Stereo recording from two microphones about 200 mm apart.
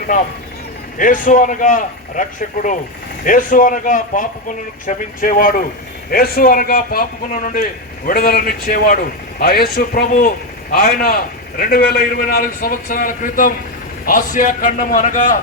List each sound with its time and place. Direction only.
0.9 s a man's voice: 40° left (ahead or behind)